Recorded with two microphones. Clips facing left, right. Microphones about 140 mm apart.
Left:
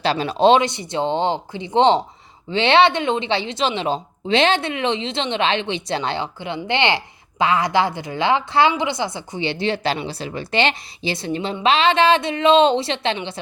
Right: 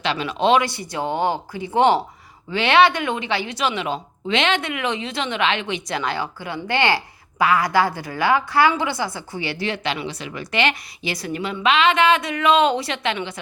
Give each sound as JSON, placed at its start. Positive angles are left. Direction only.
{"t": 0.0, "sound": "a woman's voice", "side_deg": 35}